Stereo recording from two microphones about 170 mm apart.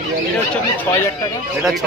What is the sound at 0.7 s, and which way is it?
Speech, 15° left (ahead or behind).